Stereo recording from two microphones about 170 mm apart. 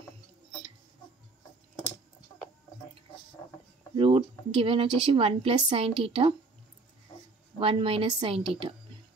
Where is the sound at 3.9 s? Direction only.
35° right (ahead or behind).